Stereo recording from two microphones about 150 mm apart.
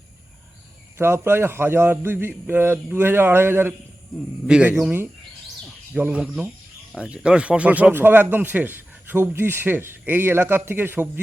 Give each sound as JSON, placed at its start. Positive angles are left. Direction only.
{"t": 0.9, "sound": "a man's voice", "side_deg": -15}